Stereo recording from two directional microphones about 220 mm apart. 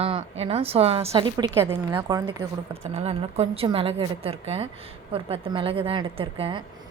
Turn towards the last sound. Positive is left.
turn(degrees=-25)  # may be behind; listen again after turning